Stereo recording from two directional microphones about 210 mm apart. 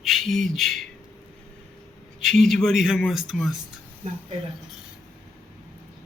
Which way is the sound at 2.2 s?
Centre (ahead or behind).